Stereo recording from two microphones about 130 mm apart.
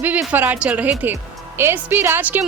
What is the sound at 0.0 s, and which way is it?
Speech, 10° right (ahead or behind).